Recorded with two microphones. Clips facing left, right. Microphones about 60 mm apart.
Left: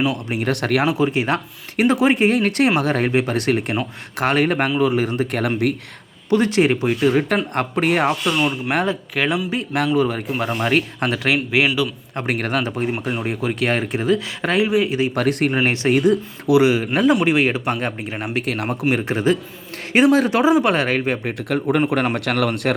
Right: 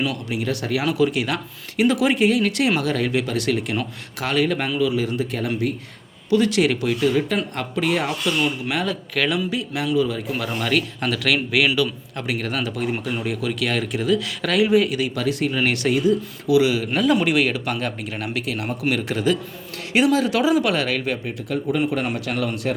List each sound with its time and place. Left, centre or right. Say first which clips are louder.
0.3 s speech: left 4 dB; left
0.9 s speech: left 2 dB; left
5.4 s a man's voice: left 5 dB; left
6.3 s speech: left 2 dB; left
8.4 s speech: left 3 dB; left
9.7 s speech: left 3 dB; left
10.6 s speech: left 3 dB; left
12.1 s speech: left 7 dB; left
15.1 s speech: left 4 dB; left
15.5 s speech: left 2 dB; left
15.9 s speech: left 4 dB; left
18.4 s speech: left 3 dB; left
18.9 s speech: left 2 dB; left
21.2 s a man's voice: left 4 dB; left